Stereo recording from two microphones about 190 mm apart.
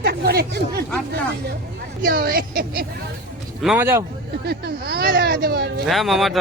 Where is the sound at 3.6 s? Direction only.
5° right (ahead or behind).